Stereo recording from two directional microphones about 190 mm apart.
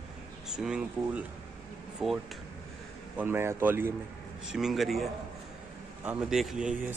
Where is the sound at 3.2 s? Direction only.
10° right (ahead or behind).